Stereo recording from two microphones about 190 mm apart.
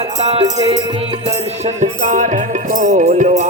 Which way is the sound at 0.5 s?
25° right (ahead or behind).